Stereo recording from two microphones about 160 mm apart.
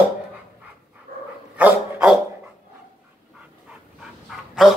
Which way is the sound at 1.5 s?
10° right (ahead or behind).